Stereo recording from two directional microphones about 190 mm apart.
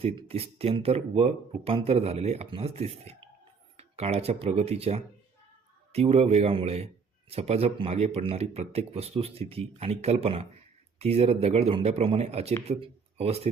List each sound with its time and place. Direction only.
0.0 s a man's voice: 30° right (ahead or behind)